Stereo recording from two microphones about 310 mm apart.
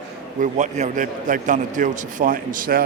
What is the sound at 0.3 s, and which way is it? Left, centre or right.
A man's voice, right.